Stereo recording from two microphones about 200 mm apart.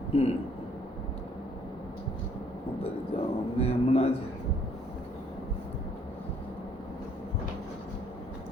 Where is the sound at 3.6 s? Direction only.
30° left (ahead or behind).